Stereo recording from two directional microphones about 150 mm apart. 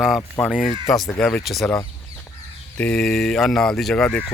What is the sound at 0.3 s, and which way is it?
Speech, centre (ahead or behind).